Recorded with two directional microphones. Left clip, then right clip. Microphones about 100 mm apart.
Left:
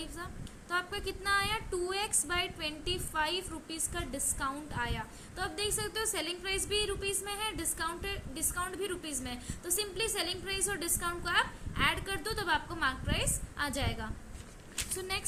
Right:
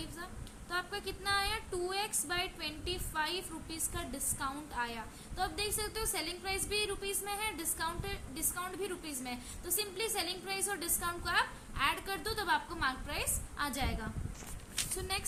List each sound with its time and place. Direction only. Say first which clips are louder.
0.7 s a woman's voice: left 3 dB; 35° left (ahead or behind)
14.9 s speech: left 3 dB; 15° left (ahead or behind)